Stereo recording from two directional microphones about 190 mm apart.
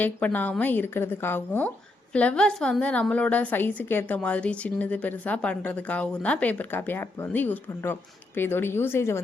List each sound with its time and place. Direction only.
0.0 s a woman's voice: 10° left (ahead or behind)